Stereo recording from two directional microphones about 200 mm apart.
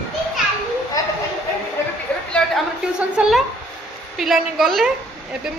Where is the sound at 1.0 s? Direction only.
15° left (ahead or behind).